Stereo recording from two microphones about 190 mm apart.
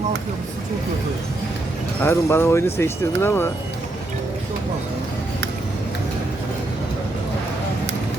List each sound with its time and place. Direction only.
2.0 s speech: 10° left (ahead or behind)